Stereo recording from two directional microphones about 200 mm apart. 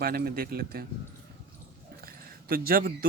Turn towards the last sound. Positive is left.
turn(degrees=-50)  # may be behind; listen again after turning